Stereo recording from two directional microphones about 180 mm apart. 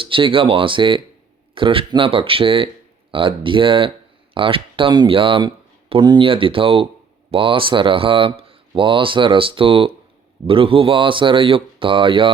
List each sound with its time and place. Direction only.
0.0 s speech: 30° right (ahead or behind)